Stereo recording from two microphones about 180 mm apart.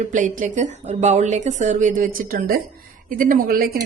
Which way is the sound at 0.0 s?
45° right (ahead or behind).